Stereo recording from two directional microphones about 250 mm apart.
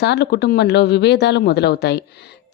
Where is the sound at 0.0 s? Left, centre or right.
Left.